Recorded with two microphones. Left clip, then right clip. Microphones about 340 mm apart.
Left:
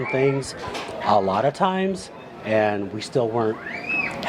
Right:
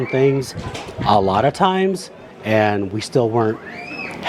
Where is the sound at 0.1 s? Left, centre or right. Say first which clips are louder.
Right 4 dB; right.